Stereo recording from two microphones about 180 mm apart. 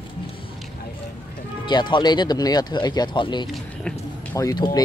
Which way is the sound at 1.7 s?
25° left (ahead or behind).